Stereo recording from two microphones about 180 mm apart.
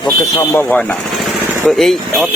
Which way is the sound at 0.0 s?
20° left (ahead or behind).